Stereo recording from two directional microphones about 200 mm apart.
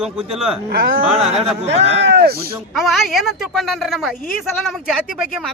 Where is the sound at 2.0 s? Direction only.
50° right (ahead or behind).